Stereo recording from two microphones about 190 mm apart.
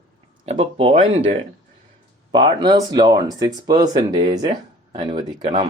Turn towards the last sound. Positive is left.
turn(degrees=-25)  # may be behind; listen again after turning